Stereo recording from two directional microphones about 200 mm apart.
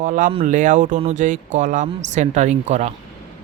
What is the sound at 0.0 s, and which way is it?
Speech, 40° right (ahead or behind).